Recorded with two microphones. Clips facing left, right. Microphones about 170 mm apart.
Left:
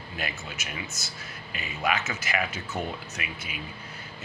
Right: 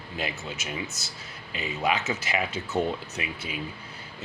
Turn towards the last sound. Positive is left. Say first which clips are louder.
# right 4 dB
turn(degrees=-30)  # may be behind; listen again after turning